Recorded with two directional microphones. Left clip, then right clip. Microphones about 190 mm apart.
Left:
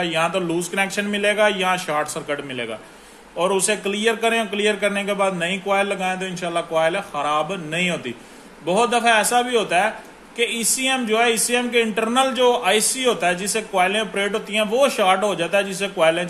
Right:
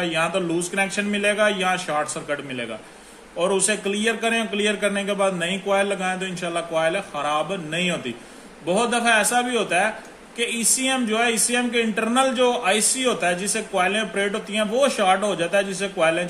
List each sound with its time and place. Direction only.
0.0 s a man's voice: 25° left (ahead or behind)